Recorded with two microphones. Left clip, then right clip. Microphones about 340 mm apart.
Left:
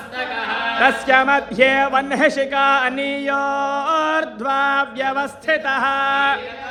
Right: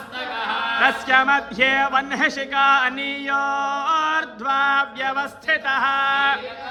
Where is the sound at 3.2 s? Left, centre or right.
Centre.